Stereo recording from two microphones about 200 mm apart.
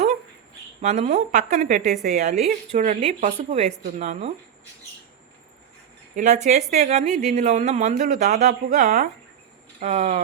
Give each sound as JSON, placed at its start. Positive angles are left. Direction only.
{"t": 0.8, "sound": "speech", "side_deg": -35}
{"t": 6.1, "sound": "speech", "side_deg": -35}